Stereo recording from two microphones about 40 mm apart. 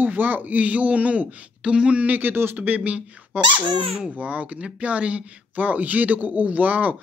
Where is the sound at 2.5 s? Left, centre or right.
Right.